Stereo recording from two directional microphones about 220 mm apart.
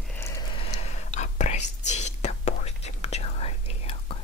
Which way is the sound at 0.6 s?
25° left (ahead or behind).